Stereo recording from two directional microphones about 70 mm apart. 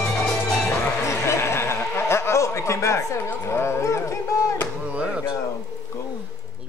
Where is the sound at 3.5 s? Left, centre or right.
Left.